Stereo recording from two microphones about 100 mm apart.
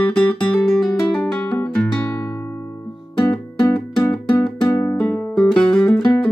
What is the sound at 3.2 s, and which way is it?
Music, 45° left (ahead or behind).